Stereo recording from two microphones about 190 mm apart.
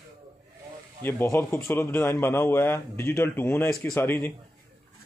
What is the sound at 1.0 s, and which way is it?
A man's voice, 10° left (ahead or behind).